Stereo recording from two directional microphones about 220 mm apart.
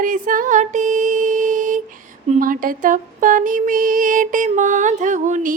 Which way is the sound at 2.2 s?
35° right (ahead or behind).